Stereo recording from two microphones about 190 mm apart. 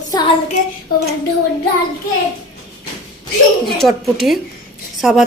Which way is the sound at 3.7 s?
Centre (ahead or behind).